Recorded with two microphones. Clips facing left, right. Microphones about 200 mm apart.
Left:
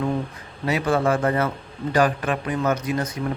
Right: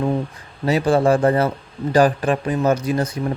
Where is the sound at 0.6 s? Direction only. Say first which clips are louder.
Right 5 dB; 35° right (ahead or behind).